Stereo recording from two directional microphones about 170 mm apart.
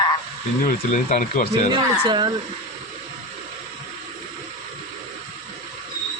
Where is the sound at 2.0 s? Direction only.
25° right (ahead or behind).